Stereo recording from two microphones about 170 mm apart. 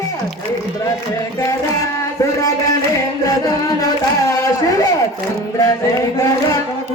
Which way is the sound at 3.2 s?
20° left (ahead or behind).